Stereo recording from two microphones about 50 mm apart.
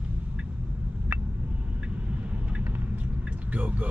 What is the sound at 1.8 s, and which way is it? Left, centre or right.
Vehicle, right.